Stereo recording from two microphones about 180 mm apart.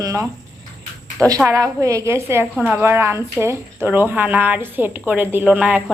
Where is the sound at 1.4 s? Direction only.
20° right (ahead or behind).